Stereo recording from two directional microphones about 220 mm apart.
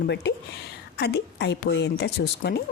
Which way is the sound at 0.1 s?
50° left (ahead or behind).